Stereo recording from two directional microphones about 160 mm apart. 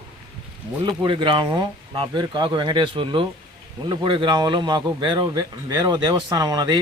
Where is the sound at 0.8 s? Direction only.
30° right (ahead or behind).